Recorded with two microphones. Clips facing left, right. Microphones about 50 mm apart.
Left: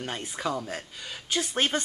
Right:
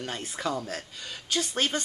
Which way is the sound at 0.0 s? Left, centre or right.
Centre.